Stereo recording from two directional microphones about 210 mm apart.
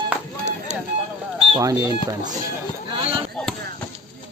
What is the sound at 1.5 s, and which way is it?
Speech, 15° right (ahead or behind).